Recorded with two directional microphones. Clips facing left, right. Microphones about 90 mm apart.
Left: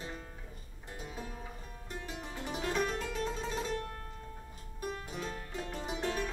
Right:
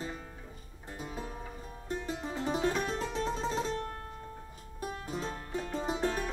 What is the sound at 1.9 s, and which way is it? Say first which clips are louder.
Music: right 7 dB; 35° right (ahead or behind).